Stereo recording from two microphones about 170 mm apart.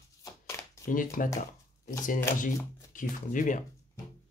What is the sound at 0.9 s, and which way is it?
Speech, 50° left (ahead or behind).